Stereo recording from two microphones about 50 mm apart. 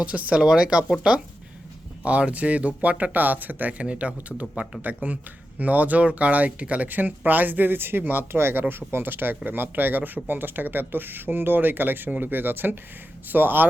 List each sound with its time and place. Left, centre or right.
0.0 s speech: right
2.0 s speech: right